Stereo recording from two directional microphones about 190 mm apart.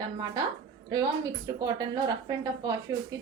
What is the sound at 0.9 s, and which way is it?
A woman's voice, 20° right (ahead or behind).